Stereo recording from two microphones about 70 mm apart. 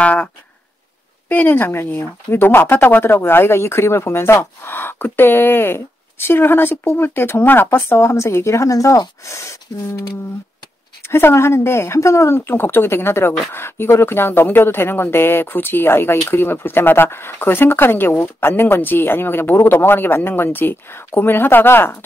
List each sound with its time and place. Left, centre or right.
0.0 s a sound: centre
1.3 s speech: left
11.1 s speech: left